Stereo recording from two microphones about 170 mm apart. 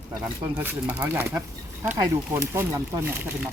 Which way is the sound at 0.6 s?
10° right (ahead or behind).